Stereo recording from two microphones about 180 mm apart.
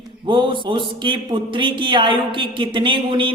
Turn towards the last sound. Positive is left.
turn(degrees=-25)  # may be behind; listen again after turning